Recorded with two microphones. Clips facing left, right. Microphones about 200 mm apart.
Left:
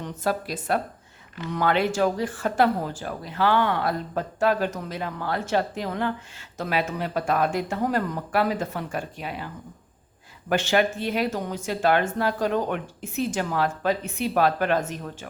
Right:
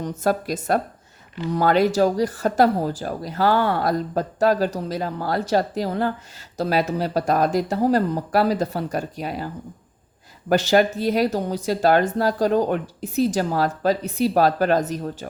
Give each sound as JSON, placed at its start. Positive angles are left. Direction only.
{"t": 0.0, "sound": "speech", "side_deg": -45}
{"t": 10.5, "sound": "speech", "side_deg": -40}